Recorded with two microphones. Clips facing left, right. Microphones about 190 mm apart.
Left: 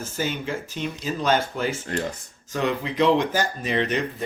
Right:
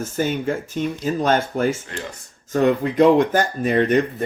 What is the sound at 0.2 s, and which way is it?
Speech, 50° right (ahead or behind).